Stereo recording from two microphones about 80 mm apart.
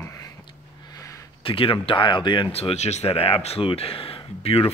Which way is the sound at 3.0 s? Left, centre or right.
Left.